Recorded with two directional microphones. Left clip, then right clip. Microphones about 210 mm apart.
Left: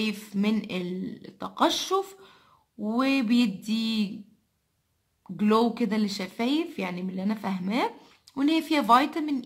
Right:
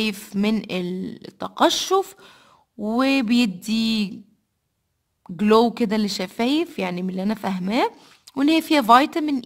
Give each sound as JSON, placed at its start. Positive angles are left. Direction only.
{"t": 0.0, "sound": "speech", "side_deg": -50}
{"t": 5.2, "sound": "speech", "side_deg": -55}